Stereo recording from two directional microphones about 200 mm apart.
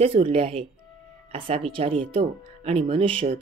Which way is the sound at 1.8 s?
30° right (ahead or behind).